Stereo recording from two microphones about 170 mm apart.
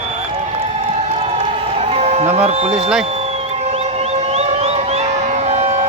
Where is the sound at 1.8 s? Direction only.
40° right (ahead or behind).